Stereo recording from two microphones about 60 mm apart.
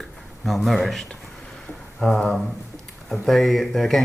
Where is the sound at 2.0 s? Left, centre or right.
Centre.